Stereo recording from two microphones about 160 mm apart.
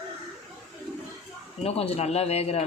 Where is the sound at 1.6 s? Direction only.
40° left (ahead or behind).